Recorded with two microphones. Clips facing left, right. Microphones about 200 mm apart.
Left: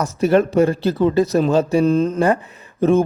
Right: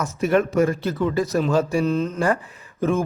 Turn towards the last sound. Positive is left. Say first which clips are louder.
# left 7 dB
turn(degrees=25)  # may be behind; listen again after turning